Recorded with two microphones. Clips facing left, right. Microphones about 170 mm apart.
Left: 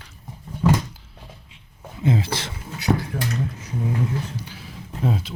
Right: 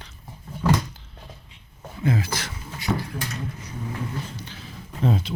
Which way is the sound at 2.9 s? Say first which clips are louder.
Left 4 dB; 40° left (ahead or behind).